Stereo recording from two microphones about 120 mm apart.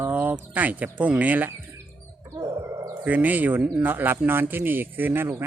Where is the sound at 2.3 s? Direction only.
25° right (ahead or behind).